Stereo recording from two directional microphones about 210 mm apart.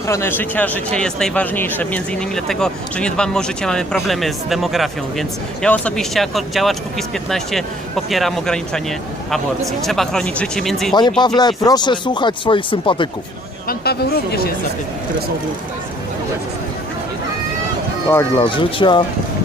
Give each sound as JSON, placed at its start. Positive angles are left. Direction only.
{"t": 0.1, "sound": "speech", "side_deg": 10}
{"t": 11.2, "sound": "speech", "side_deg": 20}
{"t": 13.7, "sound": "speech", "side_deg": 50}
{"t": 18.1, "sound": "speech", "side_deg": 15}